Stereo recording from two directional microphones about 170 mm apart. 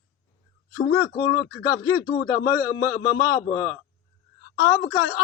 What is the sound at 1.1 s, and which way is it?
Speech, 25° left (ahead or behind).